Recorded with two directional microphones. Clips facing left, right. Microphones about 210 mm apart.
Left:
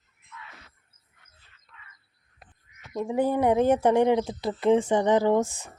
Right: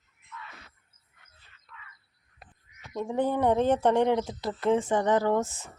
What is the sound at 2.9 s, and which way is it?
Speech, 10° left (ahead or behind).